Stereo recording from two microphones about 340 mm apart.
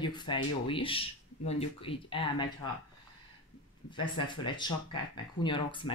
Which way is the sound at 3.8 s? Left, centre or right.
Centre.